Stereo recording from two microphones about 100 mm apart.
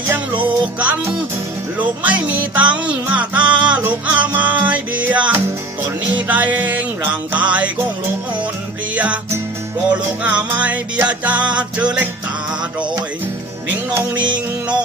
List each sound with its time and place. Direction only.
0.4 s music: 15° right (ahead or behind)
9.9 s music: 15° right (ahead or behind)